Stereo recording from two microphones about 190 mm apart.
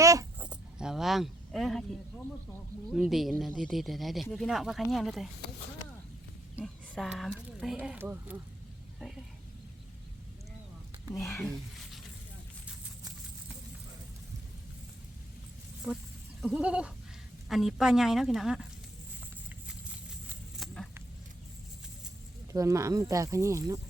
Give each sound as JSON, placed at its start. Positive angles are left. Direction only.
{"t": 0.0, "sound": "dog", "side_deg": -15}
{"t": 0.4, "sound": "keys jangling", "side_deg": -5}
{"t": 2.9, "sound": "speech", "side_deg": 0}
{"t": 6.6, "sound": "speech", "side_deg": -5}
{"t": 11.1, "sound": "speech", "side_deg": 15}
{"t": 15.9, "sound": "speech", "side_deg": -5}
{"t": 20.3, "sound": "a sound", "side_deg": 0}
{"t": 22.5, "sound": "speech", "side_deg": -15}